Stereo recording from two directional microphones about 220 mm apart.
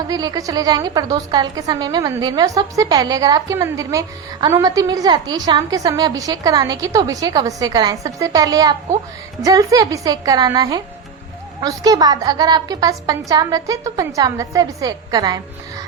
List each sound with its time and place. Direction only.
0.1 s a woman's voice: 15° right (ahead or behind)